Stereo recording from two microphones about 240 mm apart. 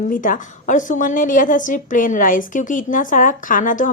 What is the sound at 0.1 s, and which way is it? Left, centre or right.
A woman's voice, left.